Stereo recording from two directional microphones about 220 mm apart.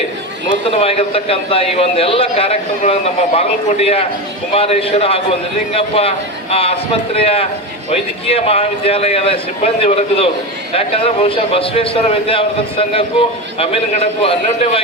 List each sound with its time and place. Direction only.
0.7 s a man's voice: 25° left (ahead or behind)